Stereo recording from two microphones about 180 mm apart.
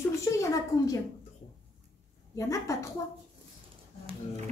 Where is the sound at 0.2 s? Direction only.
15° left (ahead or behind).